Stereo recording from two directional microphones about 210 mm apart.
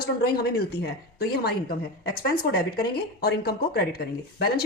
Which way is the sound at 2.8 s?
50° left (ahead or behind).